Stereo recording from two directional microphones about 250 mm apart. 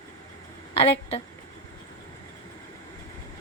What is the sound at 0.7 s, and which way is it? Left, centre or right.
Speech, left.